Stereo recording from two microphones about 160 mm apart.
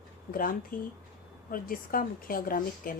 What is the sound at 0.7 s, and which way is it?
A woman's voice, 60° left (ahead or behind).